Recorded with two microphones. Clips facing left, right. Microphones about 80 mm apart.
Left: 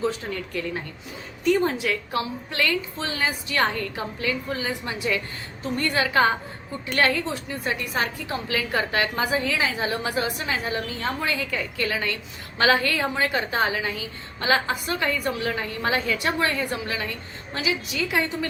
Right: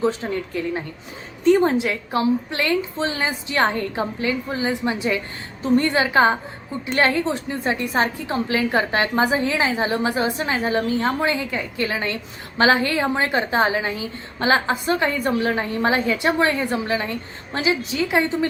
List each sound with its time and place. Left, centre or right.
0.0 s a woman's voice: right